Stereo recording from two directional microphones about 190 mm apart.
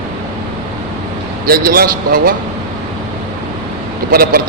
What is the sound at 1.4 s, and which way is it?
Speech, 50° right (ahead or behind).